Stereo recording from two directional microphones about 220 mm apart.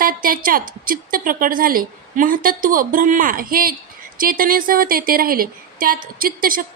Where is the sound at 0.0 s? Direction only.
40° right (ahead or behind).